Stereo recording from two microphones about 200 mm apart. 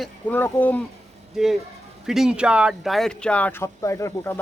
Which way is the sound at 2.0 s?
Centre (ahead or behind).